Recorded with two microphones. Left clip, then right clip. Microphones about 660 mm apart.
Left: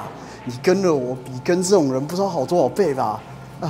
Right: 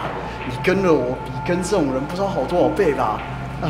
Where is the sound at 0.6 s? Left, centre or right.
Left.